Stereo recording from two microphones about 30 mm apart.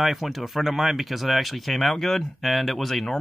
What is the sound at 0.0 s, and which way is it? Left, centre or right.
Speech, centre.